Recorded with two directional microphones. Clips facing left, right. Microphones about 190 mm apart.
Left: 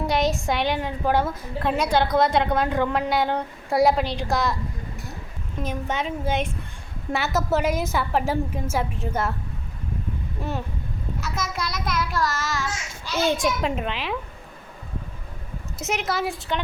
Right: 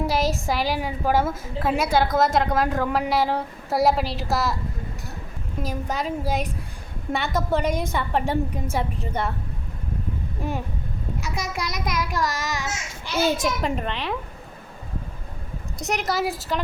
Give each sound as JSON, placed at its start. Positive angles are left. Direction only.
{"t": 0.1, "sound": "a woman's voice", "side_deg": 0}
{"t": 5.6, "sound": "a woman's voice", "side_deg": 0}
{"t": 11.2, "sound": "a child's voice", "side_deg": -15}
{"t": 13.2, "sound": "a woman's voice", "side_deg": -5}
{"t": 15.8, "sound": "a woman's voice", "side_deg": 0}